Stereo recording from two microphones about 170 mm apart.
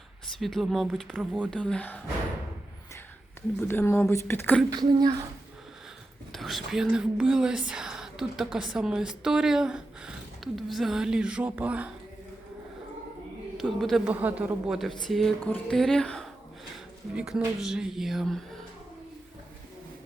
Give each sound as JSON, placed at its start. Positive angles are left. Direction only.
{"t": 0.3, "sound": "speech", "side_deg": 0}
{"t": 1.5, "sound": "a woman's voice", "side_deg": 5}
{"t": 3.7, "sound": "a woman's voice", "side_deg": 15}
{"t": 4.7, "sound": "speech", "side_deg": -25}
{"t": 6.3, "sound": "speech", "side_deg": 0}
{"t": 13.6, "sound": "speech", "side_deg": 0}